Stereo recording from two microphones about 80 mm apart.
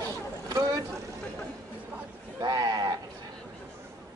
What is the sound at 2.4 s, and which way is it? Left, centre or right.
Speech, right.